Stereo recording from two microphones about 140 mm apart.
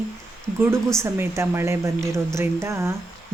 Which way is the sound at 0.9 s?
20° right (ahead or behind).